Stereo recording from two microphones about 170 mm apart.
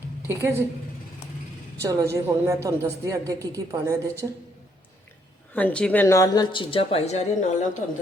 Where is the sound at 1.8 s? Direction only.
20° right (ahead or behind).